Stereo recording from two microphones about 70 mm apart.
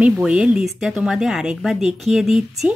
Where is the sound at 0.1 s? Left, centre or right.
Centre.